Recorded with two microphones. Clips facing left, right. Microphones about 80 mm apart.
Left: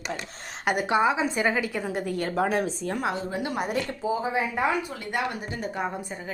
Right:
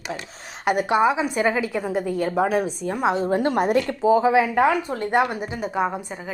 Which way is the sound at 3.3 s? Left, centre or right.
Right.